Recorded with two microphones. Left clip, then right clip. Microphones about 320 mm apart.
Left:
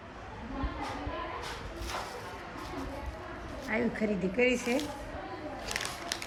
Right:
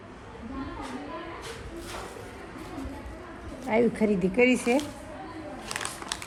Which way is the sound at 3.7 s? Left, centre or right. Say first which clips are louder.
Right 8 dB; right.